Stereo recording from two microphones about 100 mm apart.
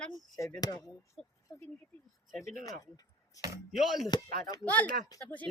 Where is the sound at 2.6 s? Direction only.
35° left (ahead or behind).